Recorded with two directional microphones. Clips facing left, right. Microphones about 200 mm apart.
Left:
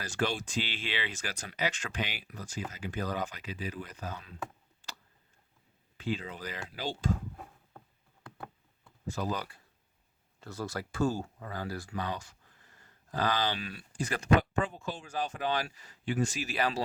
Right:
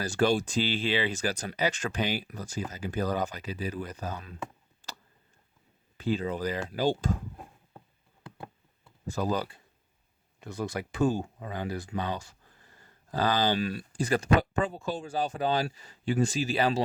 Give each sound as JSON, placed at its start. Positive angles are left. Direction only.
{"t": 0.0, "sound": "speech", "side_deg": -35}
{"t": 6.0, "sound": "speech", "side_deg": -40}
{"t": 9.1, "sound": "speech", "side_deg": -35}
{"t": 10.4, "sound": "speech", "side_deg": -15}